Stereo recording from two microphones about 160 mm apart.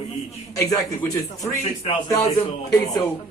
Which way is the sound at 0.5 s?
15° left (ahead or behind).